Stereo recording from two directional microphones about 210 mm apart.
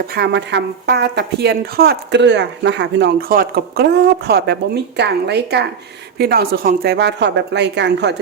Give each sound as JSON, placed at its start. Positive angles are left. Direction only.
{"t": 0.1, "sound": "a woman's voice", "side_deg": -55}